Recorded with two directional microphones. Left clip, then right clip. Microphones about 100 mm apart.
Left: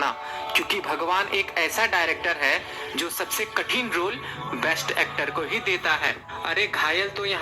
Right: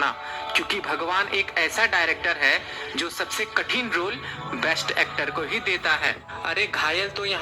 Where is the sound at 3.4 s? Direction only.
45° right (ahead or behind).